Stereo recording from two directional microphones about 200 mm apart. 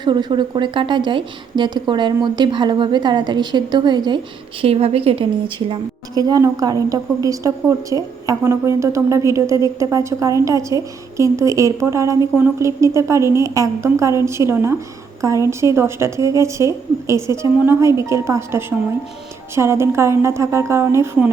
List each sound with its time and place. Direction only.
0.0 s a woman's voice: 20° right (ahead or behind)